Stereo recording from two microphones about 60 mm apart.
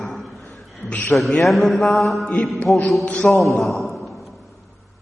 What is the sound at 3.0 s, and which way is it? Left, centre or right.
Speech, left.